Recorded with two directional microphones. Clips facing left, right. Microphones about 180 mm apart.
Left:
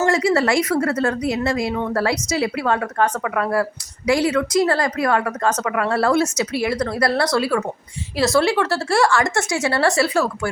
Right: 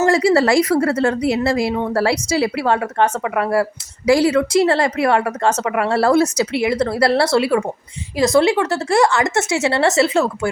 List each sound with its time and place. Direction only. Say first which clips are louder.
0.0 s a woman's voice: right 3 dB; 30° right (ahead or behind)
6.6 s a woman's voice: right 3 dB; 20° right (ahead or behind)